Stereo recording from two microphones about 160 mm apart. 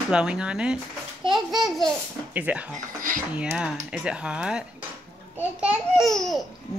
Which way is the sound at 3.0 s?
55° right (ahead or behind).